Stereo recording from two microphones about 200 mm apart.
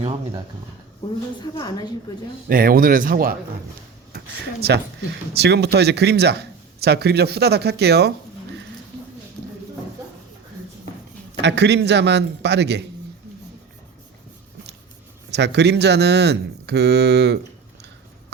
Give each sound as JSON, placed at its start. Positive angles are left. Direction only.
{"t": 1.5, "sound": "a woman's voice", "side_deg": 20}
{"t": 2.5, "sound": "speech", "side_deg": -45}
{"t": 4.6, "sound": "speech", "side_deg": -55}
{"t": 11.4, "sound": "speech", "side_deg": -60}
{"t": 15.3, "sound": "speech", "side_deg": -60}